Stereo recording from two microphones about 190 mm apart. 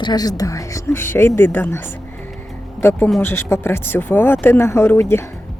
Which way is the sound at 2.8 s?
Centre (ahead or behind).